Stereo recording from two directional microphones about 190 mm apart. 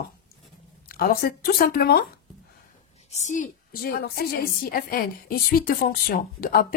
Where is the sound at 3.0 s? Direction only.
35° left (ahead or behind).